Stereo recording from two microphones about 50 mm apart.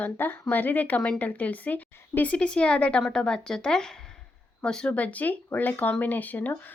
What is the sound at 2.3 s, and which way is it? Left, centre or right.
Speech, centre.